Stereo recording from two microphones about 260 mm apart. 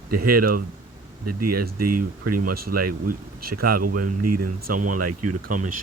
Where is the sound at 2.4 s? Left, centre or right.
Right.